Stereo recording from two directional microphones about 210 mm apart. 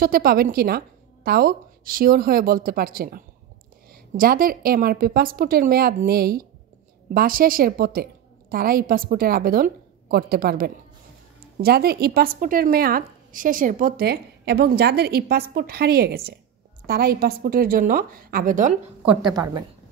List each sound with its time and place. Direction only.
0.0 s speech: 45° right (ahead or behind)
19.2 s a woman's voice: 20° right (ahead or behind)